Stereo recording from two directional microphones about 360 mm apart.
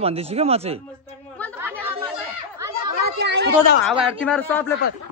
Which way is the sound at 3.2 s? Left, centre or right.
Right.